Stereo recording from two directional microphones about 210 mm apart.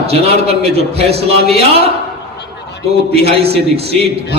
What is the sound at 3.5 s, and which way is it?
Speech, 30° right (ahead or behind).